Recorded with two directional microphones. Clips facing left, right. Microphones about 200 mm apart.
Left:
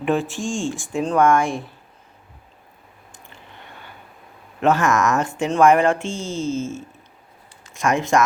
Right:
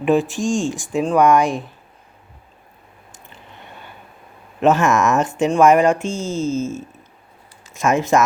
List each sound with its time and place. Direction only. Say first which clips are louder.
0.0 s speech: right 5 dB; 15° right (ahead or behind)
4.6 s speech: right 3 dB; 20° right (ahead or behind)
6.1 s speech: right 3 dB; 40° right (ahead or behind)
7.8 s speech: right 2 dB; 20° right (ahead or behind)